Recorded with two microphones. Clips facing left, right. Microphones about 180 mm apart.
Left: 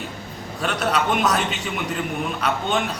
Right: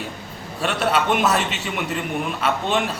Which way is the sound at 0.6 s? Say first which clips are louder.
Right 1 dB; 5° right (ahead or behind).